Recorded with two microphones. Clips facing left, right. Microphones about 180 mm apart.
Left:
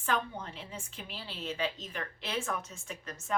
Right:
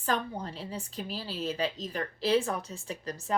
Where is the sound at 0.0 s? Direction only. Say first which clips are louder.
Right 2 dB; 35° right (ahead or behind).